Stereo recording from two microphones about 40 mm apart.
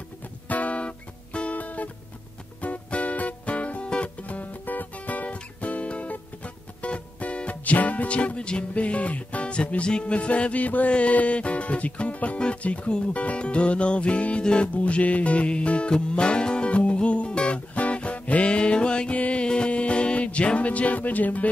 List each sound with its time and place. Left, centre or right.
0.5 s music: left
4.2 s music: left
12.4 s speech: left
14.7 s music: left
19.1 s music: left
19.4 s music: left